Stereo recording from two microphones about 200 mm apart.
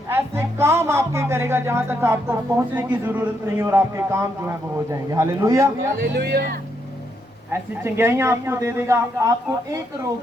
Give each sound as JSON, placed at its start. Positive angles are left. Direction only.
{"t": 0.1, "sound": "speech", "side_deg": -10}
{"t": 6.1, "sound": "speech", "side_deg": -50}
{"t": 7.5, "sound": "speech", "side_deg": -10}